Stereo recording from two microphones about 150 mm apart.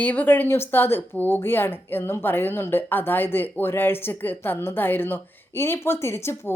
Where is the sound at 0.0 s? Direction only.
10° left (ahead or behind).